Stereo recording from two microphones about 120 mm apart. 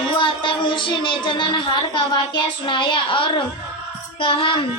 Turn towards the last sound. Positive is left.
turn(degrees=45)  # may be behind; listen again after turning